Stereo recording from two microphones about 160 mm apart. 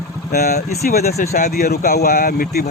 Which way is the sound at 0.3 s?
70° left (ahead or behind).